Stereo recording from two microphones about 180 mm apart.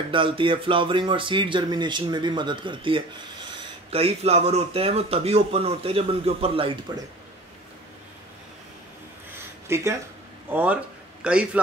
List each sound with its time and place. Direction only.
0.1 s speech: 30° right (ahead or behind)
9.7 s a man's voice: 15° right (ahead or behind)